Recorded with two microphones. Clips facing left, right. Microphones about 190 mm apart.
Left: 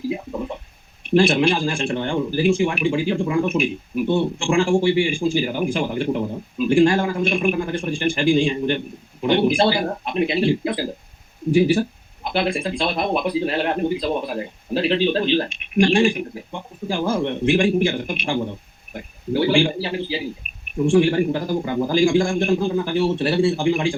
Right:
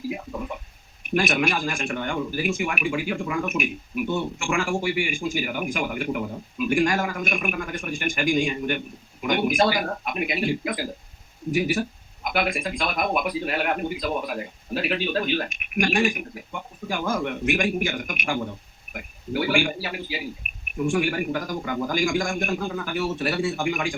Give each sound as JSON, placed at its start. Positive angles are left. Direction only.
{"t": 1.0, "sound": "a man's voice", "side_deg": 30}